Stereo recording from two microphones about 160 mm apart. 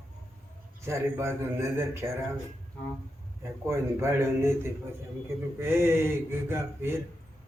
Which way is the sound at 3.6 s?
15° right (ahead or behind).